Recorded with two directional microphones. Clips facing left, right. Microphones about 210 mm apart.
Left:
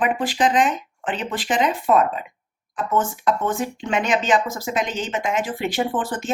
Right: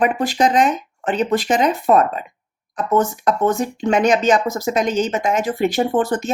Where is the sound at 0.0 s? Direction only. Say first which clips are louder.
Right 3 dB; 40° right (ahead or behind).